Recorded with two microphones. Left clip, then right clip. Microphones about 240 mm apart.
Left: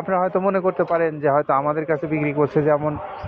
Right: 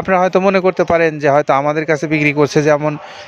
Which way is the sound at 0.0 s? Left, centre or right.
Right.